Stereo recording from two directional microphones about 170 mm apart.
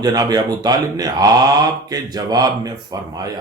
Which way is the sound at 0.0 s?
20° right (ahead or behind).